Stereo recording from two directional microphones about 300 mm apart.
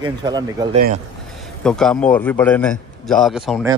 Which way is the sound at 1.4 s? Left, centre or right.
Centre.